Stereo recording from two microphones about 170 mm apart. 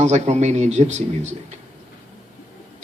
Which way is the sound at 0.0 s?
40° right (ahead or behind).